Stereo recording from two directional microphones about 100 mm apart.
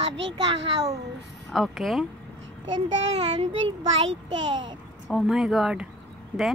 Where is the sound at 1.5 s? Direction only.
Centre (ahead or behind).